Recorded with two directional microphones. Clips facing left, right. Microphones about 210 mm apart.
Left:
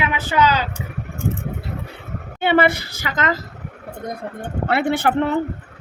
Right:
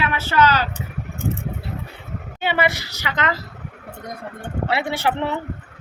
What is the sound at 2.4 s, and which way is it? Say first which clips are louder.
Speech: left 5 dB; 55° left (ahead or behind).